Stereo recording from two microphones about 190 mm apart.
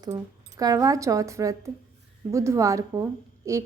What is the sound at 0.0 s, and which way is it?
A woman's voice, 20° right (ahead or behind).